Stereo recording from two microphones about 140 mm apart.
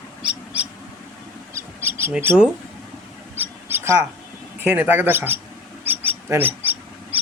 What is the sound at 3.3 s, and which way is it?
Mouse, 15° right (ahead or behind).